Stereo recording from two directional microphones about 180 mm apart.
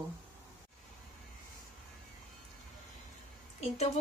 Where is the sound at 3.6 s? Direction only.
35° left (ahead or behind).